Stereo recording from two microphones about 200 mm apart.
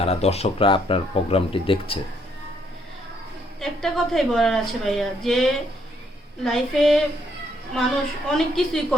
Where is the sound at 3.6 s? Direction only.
Centre (ahead or behind).